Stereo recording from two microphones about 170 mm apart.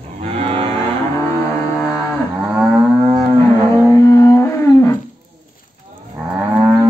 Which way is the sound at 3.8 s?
15° left (ahead or behind).